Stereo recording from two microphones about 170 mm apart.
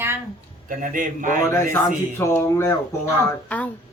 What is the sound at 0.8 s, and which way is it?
Speech, 50° right (ahead or behind).